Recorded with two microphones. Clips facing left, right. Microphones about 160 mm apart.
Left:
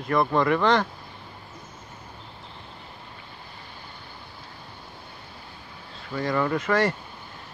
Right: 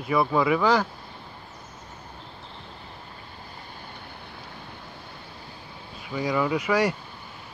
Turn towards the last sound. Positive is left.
turn(degrees=-10)  # may be behind; listen again after turning